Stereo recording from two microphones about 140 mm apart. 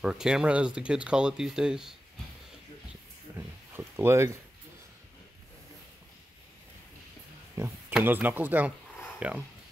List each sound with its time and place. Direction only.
0.0 s speech: 5° right (ahead or behind)
3.3 s a sound: 15° right (ahead or behind)
7.9 s speech: 15° right (ahead or behind)